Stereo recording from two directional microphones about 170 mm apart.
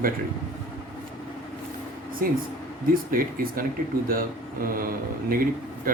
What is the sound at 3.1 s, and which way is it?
A man's voice, 55° right (ahead or behind).